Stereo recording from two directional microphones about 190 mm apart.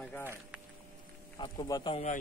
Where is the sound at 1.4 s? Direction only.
20° left (ahead or behind).